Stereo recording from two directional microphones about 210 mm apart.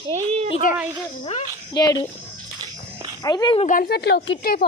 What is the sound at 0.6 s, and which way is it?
Speech, 40° left (ahead or behind).